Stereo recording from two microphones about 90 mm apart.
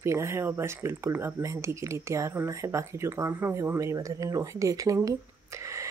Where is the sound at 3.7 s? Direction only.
35° right (ahead or behind).